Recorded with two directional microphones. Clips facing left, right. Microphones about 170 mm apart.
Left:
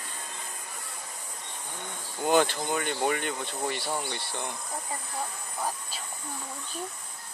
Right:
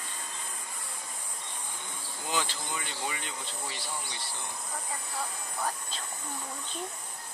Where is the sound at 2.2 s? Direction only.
55° left (ahead or behind).